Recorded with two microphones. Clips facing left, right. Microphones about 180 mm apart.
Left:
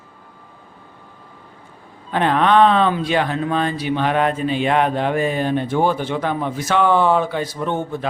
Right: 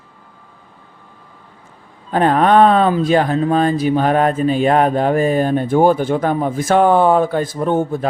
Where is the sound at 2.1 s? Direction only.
40° right (ahead or behind).